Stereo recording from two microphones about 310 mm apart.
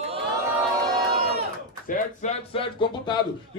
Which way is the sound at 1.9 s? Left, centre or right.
Left.